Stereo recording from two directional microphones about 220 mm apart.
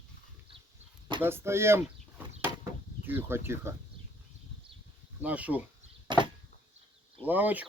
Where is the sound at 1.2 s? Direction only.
10° right (ahead or behind).